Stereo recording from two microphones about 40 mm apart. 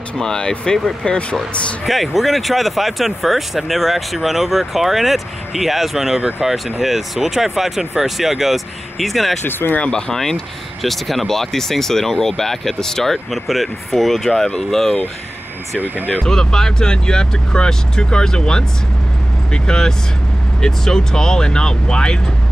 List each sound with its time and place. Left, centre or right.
0.2 s speech: centre
1.9 s speech: centre
9.4 s speech: left
9.8 s speech: left
10.1 s speech: centre
16.3 s speech: centre